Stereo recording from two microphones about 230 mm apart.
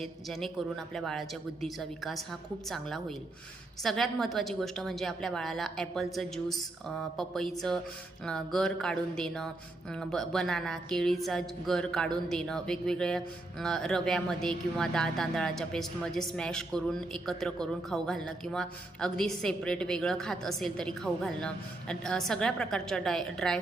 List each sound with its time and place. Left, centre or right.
0.0 s a woman's voice: centre